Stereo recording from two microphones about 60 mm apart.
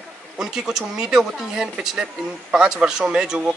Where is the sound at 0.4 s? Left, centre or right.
Centre.